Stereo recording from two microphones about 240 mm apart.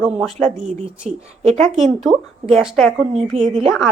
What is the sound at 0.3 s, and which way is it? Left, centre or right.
Speech, right.